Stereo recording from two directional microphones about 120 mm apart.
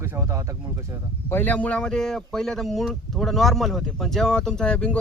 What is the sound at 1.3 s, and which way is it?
Speech, 15° left (ahead or behind).